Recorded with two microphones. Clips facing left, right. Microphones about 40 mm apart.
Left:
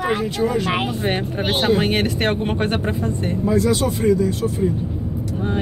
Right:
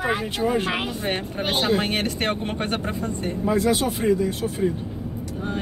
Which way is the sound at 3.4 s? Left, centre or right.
Right.